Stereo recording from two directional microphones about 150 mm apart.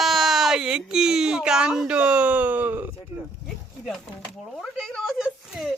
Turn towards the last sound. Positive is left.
turn(degrees=0)  # may be behind; listen again after turning